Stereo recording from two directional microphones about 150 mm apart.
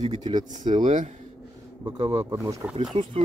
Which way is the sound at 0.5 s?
55° right (ahead or behind).